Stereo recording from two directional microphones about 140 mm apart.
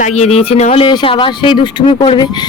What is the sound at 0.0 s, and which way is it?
Speech, 50° left (ahead or behind).